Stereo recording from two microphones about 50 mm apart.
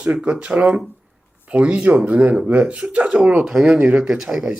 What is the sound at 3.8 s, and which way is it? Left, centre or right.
Speech, right.